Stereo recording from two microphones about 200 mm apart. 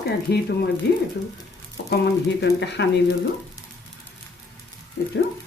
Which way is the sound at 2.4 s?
60° left (ahead or behind).